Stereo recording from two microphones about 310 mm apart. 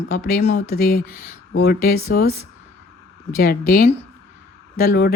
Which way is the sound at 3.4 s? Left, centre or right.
Left.